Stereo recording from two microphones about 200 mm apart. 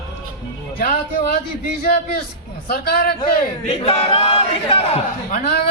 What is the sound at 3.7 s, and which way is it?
Battle cry, 30° left (ahead or behind).